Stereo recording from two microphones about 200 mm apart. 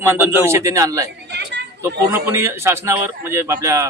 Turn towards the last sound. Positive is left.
turn(degrees=-15)  # may be behind; listen again after turning